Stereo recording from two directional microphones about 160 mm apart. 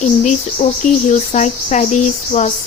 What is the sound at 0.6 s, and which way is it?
Speech, 45° left (ahead or behind).